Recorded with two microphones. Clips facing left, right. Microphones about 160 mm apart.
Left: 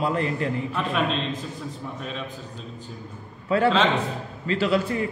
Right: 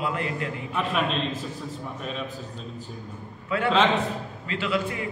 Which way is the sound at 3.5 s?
35° left (ahead or behind).